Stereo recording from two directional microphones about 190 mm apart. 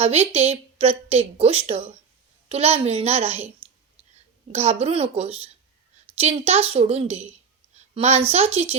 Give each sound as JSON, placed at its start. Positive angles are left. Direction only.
{"t": 0.0, "sound": "a woman's voice", "side_deg": -35}
{"t": 4.5, "sound": "a woman's voice", "side_deg": -35}